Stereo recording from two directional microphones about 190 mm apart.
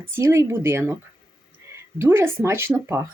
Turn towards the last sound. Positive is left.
turn(degrees=-15)  # may be behind; listen again after turning